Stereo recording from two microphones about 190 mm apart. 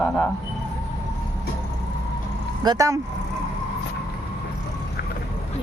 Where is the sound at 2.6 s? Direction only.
15° right (ahead or behind).